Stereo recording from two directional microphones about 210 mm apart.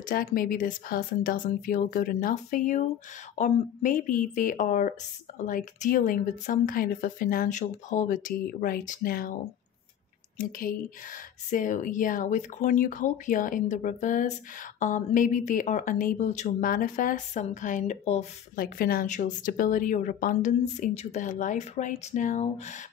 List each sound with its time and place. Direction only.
0.0 s speech: 45° left (ahead or behind)
10.3 s speech: 40° left (ahead or behind)